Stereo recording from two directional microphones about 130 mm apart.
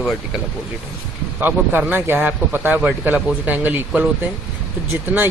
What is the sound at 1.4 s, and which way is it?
Speech, 15° right (ahead or behind).